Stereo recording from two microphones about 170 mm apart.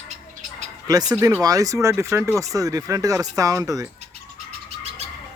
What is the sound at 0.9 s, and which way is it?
Speech, 20° right (ahead or behind).